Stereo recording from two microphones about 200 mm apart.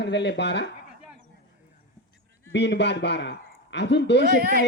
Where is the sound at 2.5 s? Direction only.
60° left (ahead or behind).